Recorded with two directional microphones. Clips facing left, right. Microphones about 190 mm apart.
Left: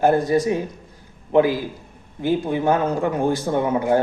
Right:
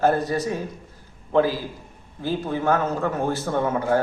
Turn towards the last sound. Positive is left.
turn(degrees=15)  # may be behind; listen again after turning